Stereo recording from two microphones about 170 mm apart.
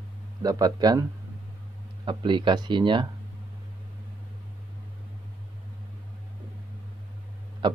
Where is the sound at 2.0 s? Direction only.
30° right (ahead or behind).